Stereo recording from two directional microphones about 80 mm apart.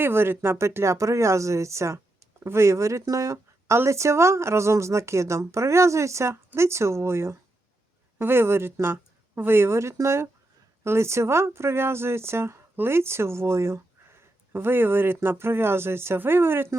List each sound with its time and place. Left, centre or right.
0.0 s speech: right